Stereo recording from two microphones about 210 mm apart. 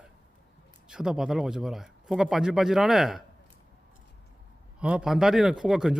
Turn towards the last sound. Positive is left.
turn(degrees=0)  # may be behind; listen again after turning